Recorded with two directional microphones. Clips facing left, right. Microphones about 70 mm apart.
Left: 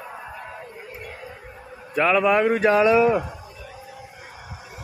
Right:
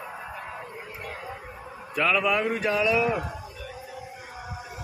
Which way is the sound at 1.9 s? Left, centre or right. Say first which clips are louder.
Left 5 dB; left.